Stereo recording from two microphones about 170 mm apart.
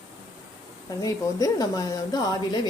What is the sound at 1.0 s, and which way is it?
Speech, 20° left (ahead or behind).